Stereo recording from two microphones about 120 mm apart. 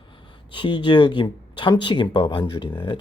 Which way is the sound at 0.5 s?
40° left (ahead or behind).